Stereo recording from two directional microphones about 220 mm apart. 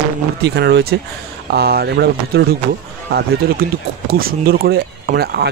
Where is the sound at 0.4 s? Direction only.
50° right (ahead or behind).